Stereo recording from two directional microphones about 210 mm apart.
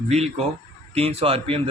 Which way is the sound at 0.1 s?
30° right (ahead or behind).